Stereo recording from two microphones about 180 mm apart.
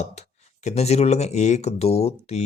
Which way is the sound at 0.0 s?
40° left (ahead or behind).